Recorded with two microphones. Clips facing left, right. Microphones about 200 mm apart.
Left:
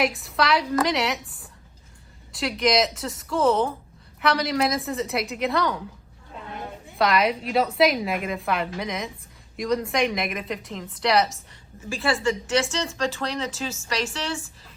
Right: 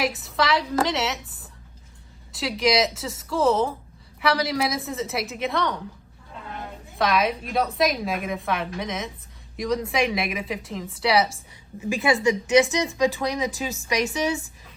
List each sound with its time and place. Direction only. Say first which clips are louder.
0.1 s a woman's voice: even; centre (ahead or behind)
2.3 s a woman's voice: even; centre (ahead or behind)
7.0 s a woman's voice: left 1 dB; centre (ahead or behind)
11.8 s speech: right 3 dB; 15° right (ahead or behind)